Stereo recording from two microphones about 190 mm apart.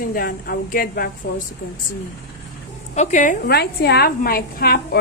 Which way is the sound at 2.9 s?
40° left (ahead or behind).